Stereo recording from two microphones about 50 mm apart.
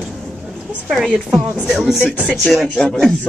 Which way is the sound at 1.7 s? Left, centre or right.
Centre.